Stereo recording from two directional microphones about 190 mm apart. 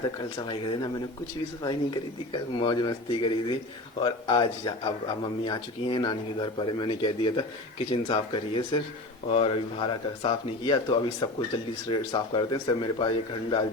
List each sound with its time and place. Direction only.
0.4 s speech: 25° left (ahead or behind)